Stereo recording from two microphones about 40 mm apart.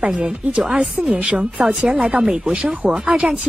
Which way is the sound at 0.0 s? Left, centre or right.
Right.